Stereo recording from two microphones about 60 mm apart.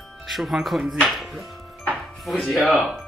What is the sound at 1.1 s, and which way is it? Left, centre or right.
Music, centre.